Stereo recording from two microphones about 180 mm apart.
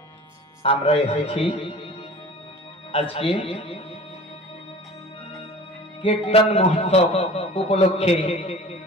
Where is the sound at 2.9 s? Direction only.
30° left (ahead or behind).